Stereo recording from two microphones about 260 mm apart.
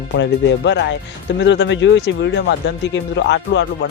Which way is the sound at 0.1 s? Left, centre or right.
Left.